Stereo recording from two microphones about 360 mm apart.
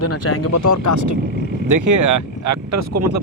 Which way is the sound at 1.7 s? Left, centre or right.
Right.